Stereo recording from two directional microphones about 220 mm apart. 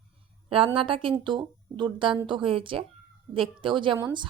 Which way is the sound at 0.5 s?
25° right (ahead or behind).